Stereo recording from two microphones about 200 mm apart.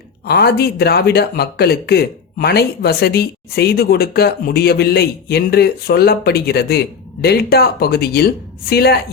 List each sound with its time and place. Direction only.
0.3 s speech: 50° left (ahead or behind)